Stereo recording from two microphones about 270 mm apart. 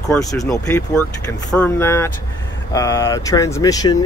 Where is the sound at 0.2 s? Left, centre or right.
Centre.